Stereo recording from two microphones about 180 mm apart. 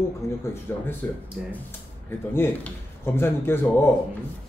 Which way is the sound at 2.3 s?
10° left (ahead or behind).